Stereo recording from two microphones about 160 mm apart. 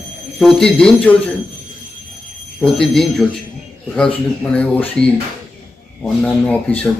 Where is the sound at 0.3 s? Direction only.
5° left (ahead or behind).